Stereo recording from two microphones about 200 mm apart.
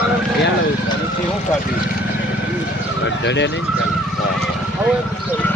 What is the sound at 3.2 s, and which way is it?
Speech, 60° left (ahead or behind).